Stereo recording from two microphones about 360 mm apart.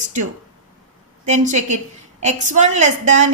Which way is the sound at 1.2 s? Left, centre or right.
Centre.